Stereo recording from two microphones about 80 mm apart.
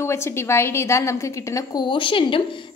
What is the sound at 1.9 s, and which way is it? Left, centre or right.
Speech, left.